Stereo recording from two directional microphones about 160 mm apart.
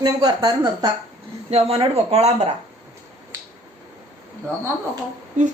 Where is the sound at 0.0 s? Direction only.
25° right (ahead or behind).